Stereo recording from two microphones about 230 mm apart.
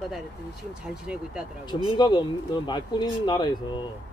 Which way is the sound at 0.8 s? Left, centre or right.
Centre.